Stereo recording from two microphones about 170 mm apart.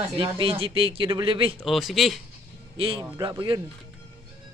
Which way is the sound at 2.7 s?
30° right (ahead or behind).